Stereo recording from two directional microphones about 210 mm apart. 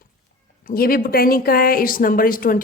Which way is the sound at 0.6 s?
45° left (ahead or behind).